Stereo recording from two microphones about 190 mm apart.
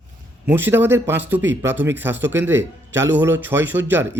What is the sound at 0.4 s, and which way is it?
A man's voice, 10° right (ahead or behind).